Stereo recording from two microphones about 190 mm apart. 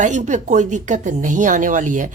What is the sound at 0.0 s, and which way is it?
Speech, 40° right (ahead or behind).